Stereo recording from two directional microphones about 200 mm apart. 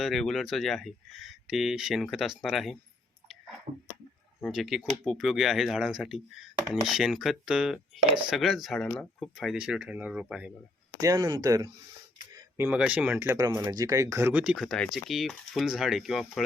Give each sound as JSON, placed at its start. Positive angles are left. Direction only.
{"t": 0.0, "sound": "speech", "side_deg": 0}
{"t": 4.4, "sound": "speech", "side_deg": 0}
{"t": 11.0, "sound": "speech", "side_deg": -20}